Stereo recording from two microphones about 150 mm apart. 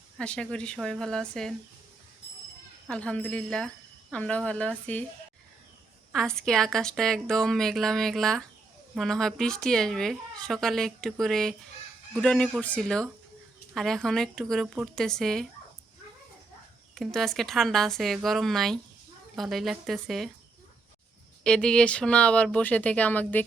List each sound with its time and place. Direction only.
0.2 s speech: 5° left (ahead or behind)
2.8 s speech: 5° left (ahead or behind)
6.1 s speech: 5° left (ahead or behind)
16.9 s speech: centre (ahead or behind)
21.4 s speech: 5° left (ahead or behind)